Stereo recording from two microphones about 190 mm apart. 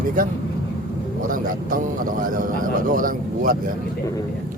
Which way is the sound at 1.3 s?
45° right (ahead or behind).